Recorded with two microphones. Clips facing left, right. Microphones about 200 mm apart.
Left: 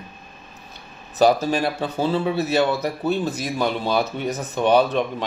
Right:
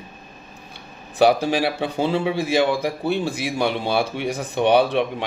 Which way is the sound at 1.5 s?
70° right (ahead or behind).